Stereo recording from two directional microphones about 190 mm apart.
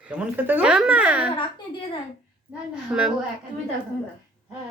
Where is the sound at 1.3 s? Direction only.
25° left (ahead or behind).